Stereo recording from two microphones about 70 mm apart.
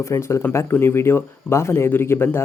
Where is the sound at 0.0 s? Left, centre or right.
Left.